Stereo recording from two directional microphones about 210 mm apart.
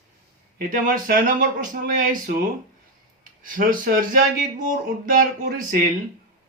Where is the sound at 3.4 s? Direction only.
40° right (ahead or behind).